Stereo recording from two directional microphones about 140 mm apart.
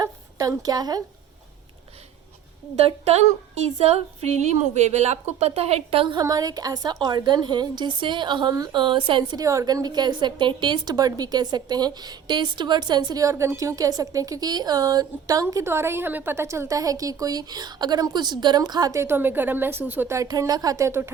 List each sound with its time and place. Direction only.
0.0 s a sound: 25° right (ahead or behind)
2.8 s a woman's voice: 50° right (ahead or behind)
6.1 s a woman's voice: 25° right (ahead or behind)
9.4 s a woman's voice: 25° right (ahead or behind)